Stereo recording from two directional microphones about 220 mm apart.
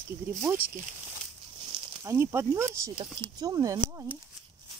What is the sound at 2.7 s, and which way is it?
Speech, 25° right (ahead or behind).